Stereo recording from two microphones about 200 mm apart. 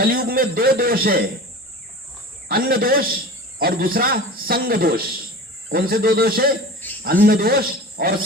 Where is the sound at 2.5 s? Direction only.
50° right (ahead or behind).